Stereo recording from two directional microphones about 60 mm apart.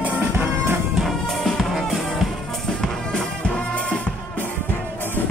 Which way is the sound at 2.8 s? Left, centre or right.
Centre.